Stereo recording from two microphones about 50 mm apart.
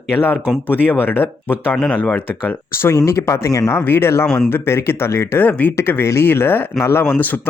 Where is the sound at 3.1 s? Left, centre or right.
Left.